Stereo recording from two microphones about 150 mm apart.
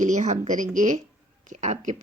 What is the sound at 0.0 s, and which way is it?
A woman's voice, 55° right (ahead or behind).